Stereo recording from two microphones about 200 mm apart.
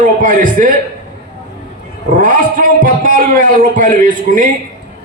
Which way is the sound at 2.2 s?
40° right (ahead or behind).